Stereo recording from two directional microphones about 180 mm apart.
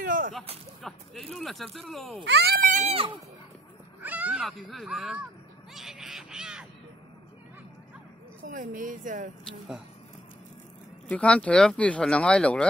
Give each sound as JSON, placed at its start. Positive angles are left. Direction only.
{"t": 0.0, "sound": "speech", "side_deg": -50}
{"t": 0.8, "sound": "speech", "side_deg": 0}
{"t": 2.2, "sound": "speech", "side_deg": -70}
{"t": 4.0, "sound": "speech", "side_deg": -10}
{"t": 5.7, "sound": "a sound", "side_deg": 0}
{"t": 8.5, "sound": "speech", "side_deg": -50}
{"t": 11.1, "sound": "speech", "side_deg": 5}